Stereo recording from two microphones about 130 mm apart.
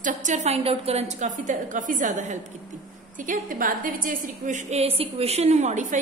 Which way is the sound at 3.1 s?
90° right.